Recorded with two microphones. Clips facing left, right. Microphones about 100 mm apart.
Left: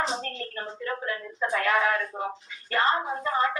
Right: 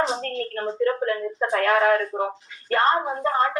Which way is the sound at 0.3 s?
55° right (ahead or behind).